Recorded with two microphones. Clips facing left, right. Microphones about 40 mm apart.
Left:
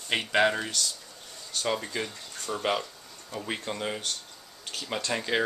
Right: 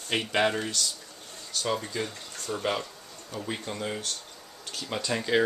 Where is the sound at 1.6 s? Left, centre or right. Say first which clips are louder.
Even; centre.